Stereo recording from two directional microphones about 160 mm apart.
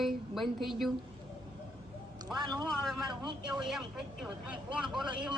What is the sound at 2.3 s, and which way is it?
Speech, 25° right (ahead or behind).